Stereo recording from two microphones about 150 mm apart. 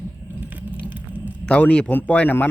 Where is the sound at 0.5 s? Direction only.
10° right (ahead or behind).